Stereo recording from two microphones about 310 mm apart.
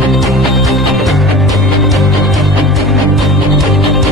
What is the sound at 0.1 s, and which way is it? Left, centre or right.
Music, centre.